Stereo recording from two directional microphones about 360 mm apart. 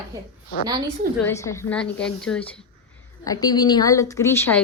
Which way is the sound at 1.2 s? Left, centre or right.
Centre.